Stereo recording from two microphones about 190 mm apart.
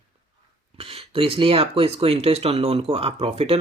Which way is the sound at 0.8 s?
30° right (ahead or behind).